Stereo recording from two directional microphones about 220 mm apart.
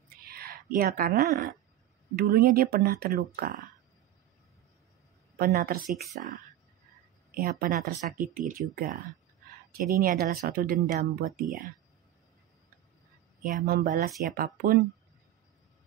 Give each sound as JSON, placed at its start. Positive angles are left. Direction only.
{"t": 0.3, "sound": "speech", "side_deg": -45}
{"t": 5.4, "sound": "speech", "side_deg": -40}
{"t": 7.3, "sound": "speech", "side_deg": -40}
{"t": 13.4, "sound": "speech", "side_deg": -40}